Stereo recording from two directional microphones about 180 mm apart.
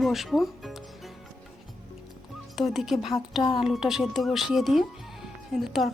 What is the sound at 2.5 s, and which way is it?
Speech, centre (ahead or behind).